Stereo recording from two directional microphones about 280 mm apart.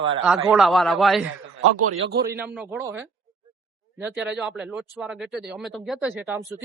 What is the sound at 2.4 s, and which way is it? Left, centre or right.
A man's voice, centre.